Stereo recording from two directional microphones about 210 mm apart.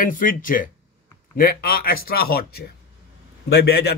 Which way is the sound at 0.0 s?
40° left (ahead or behind).